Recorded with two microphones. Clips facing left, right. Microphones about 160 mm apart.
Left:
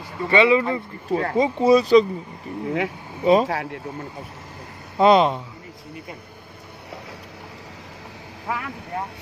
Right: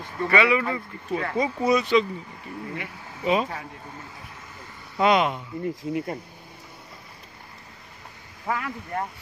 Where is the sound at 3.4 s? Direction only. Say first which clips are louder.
Left 9 dB; 90° left.